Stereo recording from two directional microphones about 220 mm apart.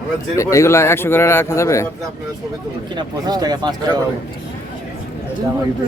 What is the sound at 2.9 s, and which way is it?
Speech, 20° right (ahead or behind).